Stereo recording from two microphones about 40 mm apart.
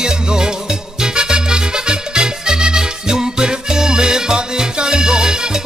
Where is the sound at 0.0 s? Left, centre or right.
Centre.